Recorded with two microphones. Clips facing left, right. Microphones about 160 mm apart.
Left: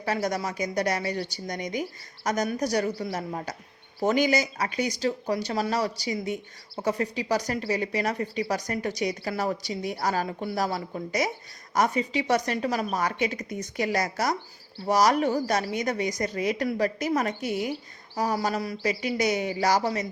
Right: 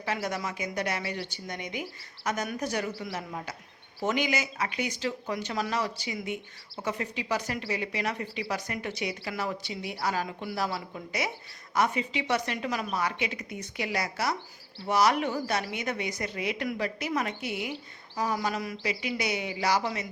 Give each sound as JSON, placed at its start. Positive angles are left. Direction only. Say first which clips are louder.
{"t": 0.0, "sound": "speech", "louder": "left 4 dB", "side_deg": 40}